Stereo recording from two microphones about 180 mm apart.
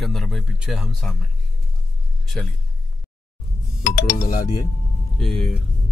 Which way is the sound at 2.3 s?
Centre (ahead or behind).